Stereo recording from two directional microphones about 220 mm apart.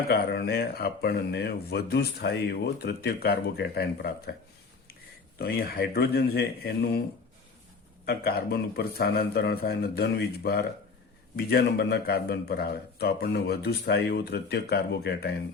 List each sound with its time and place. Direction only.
0.1 s speech: 45° left (ahead or behind)
5.4 s speech: 45° left (ahead or behind)
8.0 s speech: 45° left (ahead or behind)